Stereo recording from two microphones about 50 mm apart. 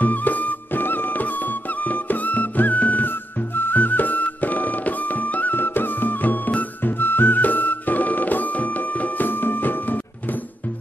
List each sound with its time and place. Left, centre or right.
0.0 s music: left